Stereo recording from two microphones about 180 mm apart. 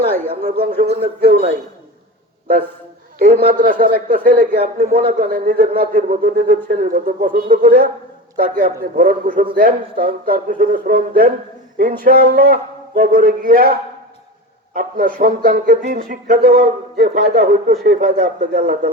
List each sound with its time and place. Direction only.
0.4 s speech: 40° right (ahead or behind)
1.2 s speech: 60° right (ahead or behind)
3.2 s a man's voice: 60° right (ahead or behind)